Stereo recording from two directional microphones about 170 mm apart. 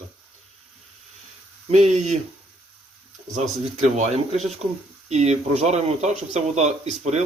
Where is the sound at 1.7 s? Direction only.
40° right (ahead or behind).